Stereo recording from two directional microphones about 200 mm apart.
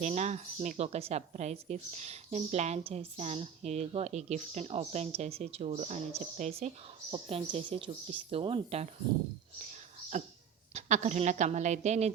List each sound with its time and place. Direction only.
0.0 s a woman's voice: 35° right (ahead or behind)
10.8 s a woman's voice: 35° right (ahead or behind)